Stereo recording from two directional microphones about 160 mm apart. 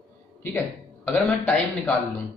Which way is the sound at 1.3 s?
5° left (ahead or behind).